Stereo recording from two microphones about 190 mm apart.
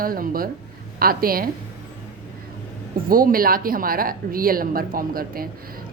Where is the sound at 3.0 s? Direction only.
50° right (ahead or behind).